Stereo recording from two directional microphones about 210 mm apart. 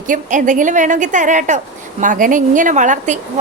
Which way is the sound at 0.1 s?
35° right (ahead or behind).